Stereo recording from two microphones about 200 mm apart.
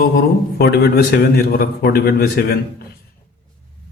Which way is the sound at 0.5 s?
50° left (ahead or behind).